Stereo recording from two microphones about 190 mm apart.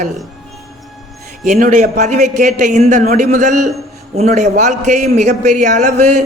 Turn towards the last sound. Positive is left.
turn(degrees=-35)  # may be behind; listen again after turning